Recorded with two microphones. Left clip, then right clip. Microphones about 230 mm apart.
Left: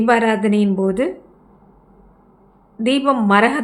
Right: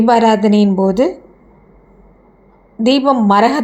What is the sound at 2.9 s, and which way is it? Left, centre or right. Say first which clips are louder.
Speech: right 4 dB; centre.